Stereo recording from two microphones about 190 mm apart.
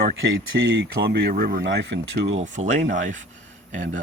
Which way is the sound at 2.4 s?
40° right (ahead or behind).